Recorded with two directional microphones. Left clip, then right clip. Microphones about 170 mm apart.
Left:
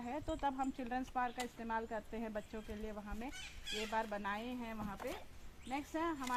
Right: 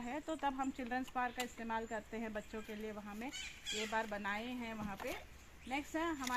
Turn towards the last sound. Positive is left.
turn(degrees=-30)  # may be behind; listen again after turning